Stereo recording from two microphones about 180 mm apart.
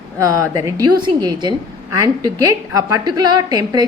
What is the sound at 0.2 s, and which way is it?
A woman's voice, 15° right (ahead or behind).